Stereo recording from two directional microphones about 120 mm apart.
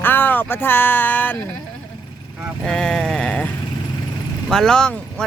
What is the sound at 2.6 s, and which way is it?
Speech, 5° left (ahead or behind).